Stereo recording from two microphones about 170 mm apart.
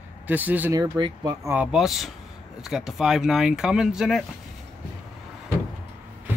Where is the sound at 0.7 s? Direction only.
25° right (ahead or behind).